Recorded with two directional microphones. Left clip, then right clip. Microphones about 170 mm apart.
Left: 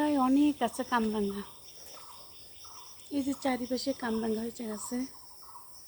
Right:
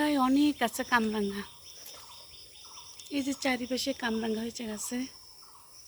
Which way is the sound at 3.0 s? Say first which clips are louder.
Right 1 dB; 20° right (ahead or behind).